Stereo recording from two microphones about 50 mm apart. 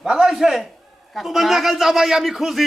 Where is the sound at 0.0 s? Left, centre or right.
Centre.